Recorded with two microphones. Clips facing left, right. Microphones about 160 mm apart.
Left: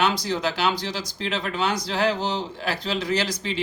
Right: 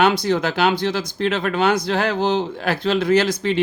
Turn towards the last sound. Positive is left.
turn(degrees=-55)  # may be behind; listen again after turning